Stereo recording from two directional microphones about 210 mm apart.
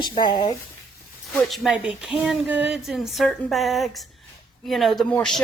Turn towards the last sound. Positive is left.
turn(degrees=5)  # may be behind; listen again after turning